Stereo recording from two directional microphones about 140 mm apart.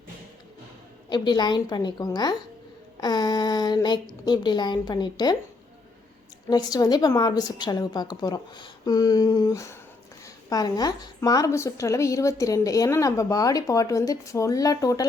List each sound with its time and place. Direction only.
1.1 s a woman's voice: 30° left (ahead or behind)
6.5 s a woman's voice: 30° left (ahead or behind)